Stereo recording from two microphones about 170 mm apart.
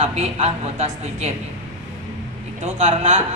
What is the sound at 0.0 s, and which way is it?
Speech, 35° right (ahead or behind).